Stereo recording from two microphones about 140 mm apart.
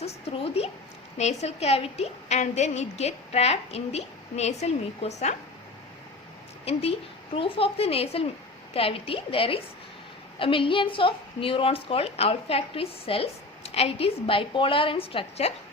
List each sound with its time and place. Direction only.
0.0 s a woman's voice: 50° left (ahead or behind)
6.7 s a woman's voice: 45° left (ahead or behind)